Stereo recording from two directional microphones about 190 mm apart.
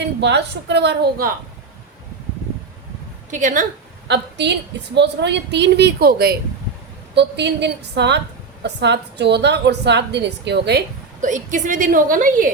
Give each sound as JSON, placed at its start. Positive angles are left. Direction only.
{"t": 0.0, "sound": "a woman's voice", "side_deg": -65}
{"t": 3.2, "sound": "a woman's voice", "side_deg": -40}
{"t": 4.1, "sound": "a woman's voice", "side_deg": -65}
{"t": 11.2, "sound": "a woman's voice", "side_deg": -40}